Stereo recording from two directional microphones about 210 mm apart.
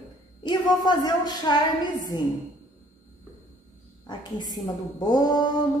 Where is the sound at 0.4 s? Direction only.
20° left (ahead or behind).